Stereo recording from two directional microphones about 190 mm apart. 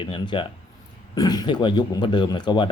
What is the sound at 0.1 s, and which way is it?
Speech, 25° left (ahead or behind).